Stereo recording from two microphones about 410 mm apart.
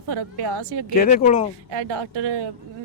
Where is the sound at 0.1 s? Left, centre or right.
Right.